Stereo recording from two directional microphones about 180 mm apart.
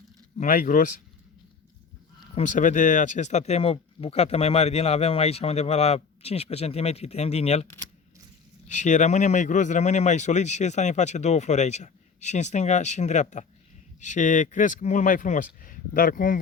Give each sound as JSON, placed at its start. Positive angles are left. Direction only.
{"t": 0.3, "sound": "speech", "side_deg": 50}
{"t": 2.3, "sound": "speech", "side_deg": 45}